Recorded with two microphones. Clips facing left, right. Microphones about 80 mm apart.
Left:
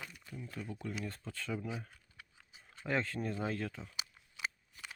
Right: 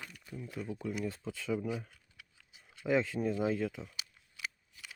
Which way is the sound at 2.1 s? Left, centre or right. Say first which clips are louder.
Left 2 dB; left.